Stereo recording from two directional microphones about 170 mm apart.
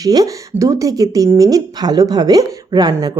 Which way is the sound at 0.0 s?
20° right (ahead or behind).